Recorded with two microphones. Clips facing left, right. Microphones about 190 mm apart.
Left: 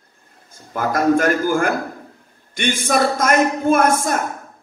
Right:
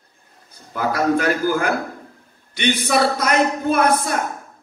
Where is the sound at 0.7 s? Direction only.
50° left (ahead or behind).